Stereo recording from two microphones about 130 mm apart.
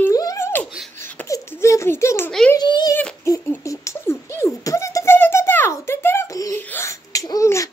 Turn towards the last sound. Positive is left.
turn(degrees=25)  # may be behind; listen again after turning